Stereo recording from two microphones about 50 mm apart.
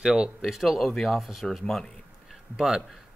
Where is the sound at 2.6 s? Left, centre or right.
Centre.